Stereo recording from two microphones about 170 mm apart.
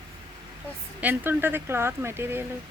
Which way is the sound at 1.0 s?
10° right (ahead or behind).